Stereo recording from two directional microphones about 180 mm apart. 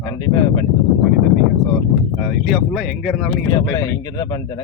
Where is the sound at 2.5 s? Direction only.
Centre (ahead or behind).